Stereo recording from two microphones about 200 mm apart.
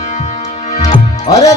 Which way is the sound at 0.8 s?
30° left (ahead or behind).